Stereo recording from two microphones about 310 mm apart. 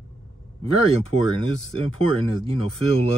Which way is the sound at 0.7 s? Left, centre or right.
Left.